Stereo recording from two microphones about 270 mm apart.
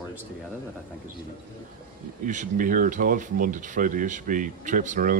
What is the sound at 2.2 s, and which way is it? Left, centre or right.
Speech, right.